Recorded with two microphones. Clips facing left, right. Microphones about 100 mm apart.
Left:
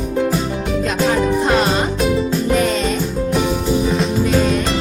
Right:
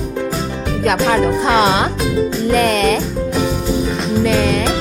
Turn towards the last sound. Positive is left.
turn(degrees=-90)